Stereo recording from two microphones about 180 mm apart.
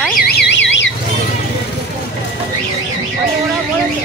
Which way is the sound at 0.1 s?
65° left (ahead or behind).